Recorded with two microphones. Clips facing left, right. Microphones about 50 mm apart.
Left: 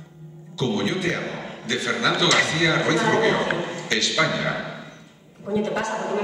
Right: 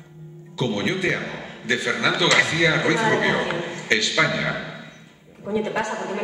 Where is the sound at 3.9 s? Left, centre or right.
Right.